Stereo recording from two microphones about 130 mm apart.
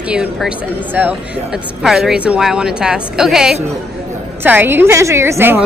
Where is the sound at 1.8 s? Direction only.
Centre (ahead or behind).